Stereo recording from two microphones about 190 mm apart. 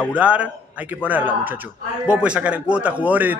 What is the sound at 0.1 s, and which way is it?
A man's voice, 5° right (ahead or behind).